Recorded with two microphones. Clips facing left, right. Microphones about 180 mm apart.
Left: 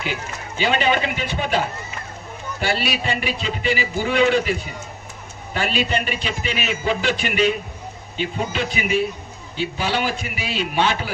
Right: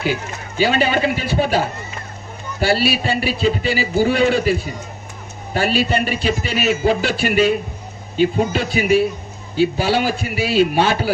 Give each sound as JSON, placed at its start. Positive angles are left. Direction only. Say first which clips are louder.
{"t": 0.0, "sound": "a man's voice", "louder": "right 6 dB", "side_deg": -40}